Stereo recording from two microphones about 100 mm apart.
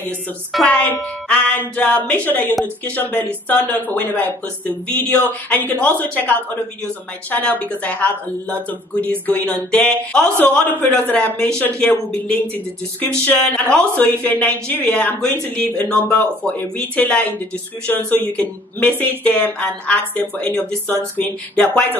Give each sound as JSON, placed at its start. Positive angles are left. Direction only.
{"t": 0.7, "sound": "speech", "side_deg": 10}